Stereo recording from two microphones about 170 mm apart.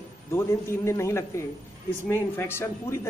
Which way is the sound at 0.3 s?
15° left (ahead or behind).